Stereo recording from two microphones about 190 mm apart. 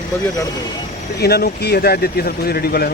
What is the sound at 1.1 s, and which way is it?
Speech, 55° left (ahead or behind).